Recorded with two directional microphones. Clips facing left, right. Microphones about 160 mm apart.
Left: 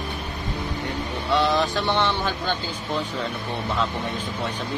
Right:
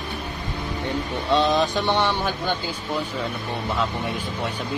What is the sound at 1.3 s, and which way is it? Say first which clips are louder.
Speech: right 2 dB; 20° right (ahead or behind).